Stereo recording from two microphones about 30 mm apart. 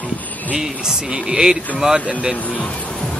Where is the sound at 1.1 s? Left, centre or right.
Right.